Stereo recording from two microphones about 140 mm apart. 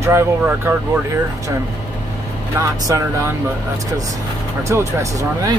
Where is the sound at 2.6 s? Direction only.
20° right (ahead or behind).